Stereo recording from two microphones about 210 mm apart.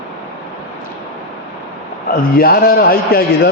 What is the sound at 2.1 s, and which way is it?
A man's voice, 45° left (ahead or behind).